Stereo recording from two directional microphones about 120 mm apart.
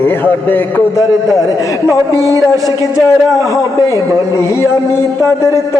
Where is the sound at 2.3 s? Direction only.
25° left (ahead or behind).